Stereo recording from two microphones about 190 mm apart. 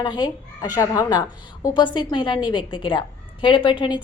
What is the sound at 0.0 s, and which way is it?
A woman's voice, 20° left (ahead or behind).